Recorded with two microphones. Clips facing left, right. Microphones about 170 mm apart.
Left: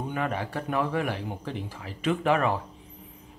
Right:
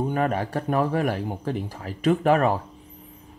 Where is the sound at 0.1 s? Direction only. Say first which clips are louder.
Right 6 dB; 45° right (ahead or behind).